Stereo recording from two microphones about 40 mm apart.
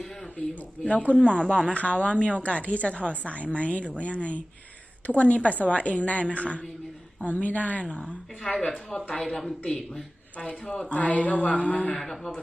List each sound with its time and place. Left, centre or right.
0.8 s speech: left
1.7 s speech: left
7.9 s speech: left
8.5 s speech: centre
10.9 s speech: left